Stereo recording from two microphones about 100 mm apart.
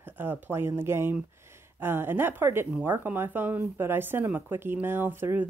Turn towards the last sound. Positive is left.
turn(degrees=-20)  # may be behind; listen again after turning